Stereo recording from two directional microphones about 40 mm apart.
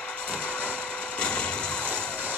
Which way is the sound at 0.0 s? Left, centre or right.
Left.